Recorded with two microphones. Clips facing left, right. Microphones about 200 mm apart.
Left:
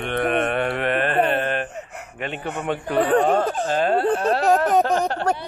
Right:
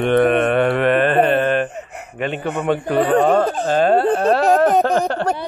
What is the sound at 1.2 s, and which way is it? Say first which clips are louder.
Carnatic music: right 5 dB; 55° right (ahead or behind).